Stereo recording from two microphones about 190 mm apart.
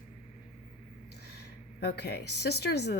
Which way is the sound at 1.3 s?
60° left (ahead or behind).